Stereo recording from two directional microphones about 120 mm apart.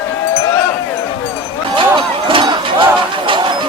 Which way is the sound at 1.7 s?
45° right (ahead or behind).